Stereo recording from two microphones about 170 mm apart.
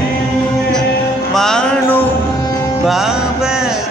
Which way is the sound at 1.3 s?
5° left (ahead or behind).